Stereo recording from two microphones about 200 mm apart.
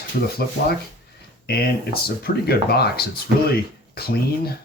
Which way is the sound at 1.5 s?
50° left (ahead or behind).